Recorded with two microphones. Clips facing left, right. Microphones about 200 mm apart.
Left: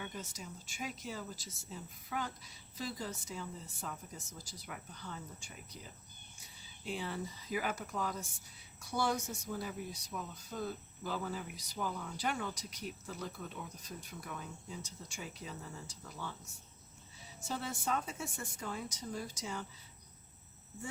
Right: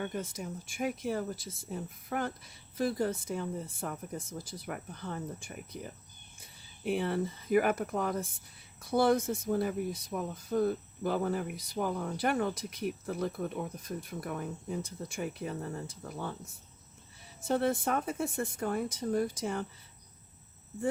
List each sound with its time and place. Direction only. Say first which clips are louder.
0.0 s speech: right 9 dB; 55° right (ahead or behind)